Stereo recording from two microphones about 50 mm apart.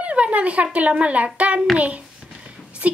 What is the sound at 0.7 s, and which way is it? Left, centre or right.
Speech, right.